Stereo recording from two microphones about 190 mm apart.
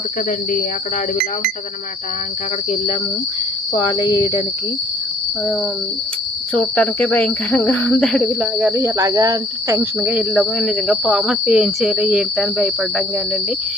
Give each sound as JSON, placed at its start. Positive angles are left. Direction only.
{"t": 3.8, "sound": "cricket", "side_deg": 25}
{"t": 6.5, "sound": "cricket", "side_deg": 5}